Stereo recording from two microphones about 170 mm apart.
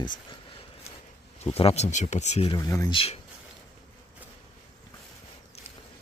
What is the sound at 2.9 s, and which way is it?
Speech, 35° left (ahead or behind).